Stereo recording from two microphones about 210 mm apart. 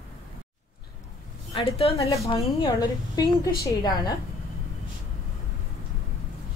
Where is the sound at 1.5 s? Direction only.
30° left (ahead or behind).